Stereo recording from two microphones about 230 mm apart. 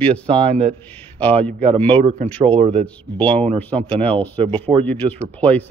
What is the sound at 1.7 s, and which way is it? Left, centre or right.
Speech, right.